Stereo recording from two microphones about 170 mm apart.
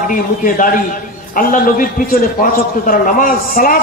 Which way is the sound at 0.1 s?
55° left (ahead or behind).